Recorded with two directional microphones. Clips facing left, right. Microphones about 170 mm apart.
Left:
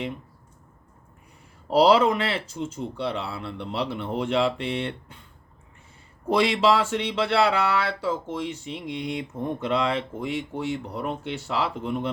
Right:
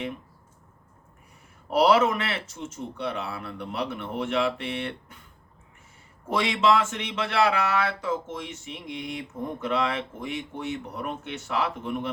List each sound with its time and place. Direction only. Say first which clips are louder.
1.7 s speech: left 2 dB; 30° left (ahead or behind)
6.3 s speech: left 2 dB; 35° left (ahead or behind)